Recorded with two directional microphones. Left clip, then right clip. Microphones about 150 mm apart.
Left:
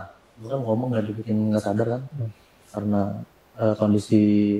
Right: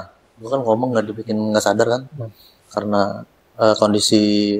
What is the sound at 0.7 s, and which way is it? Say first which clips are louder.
Speech: right 8 dB; 45° right (ahead or behind).